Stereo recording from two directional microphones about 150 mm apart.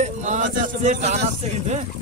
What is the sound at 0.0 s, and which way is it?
Speech, 50° right (ahead or behind).